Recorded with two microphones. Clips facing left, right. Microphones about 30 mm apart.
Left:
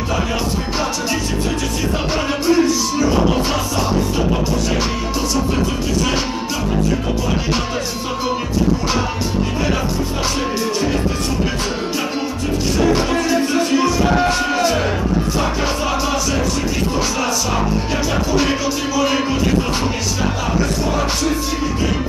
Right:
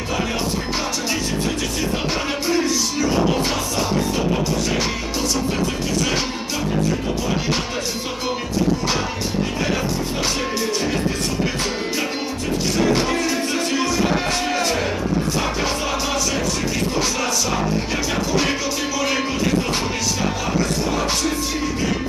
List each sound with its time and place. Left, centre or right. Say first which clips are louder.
2.5 s music: left 6 dB; centre
13.1 s music: left 4 dB; centre
17.9 s music: left 5 dB; centre